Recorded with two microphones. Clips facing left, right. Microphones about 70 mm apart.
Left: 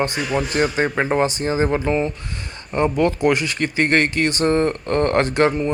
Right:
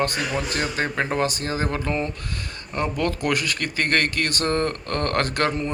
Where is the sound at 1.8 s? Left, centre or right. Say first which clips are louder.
Left 5 dB; centre.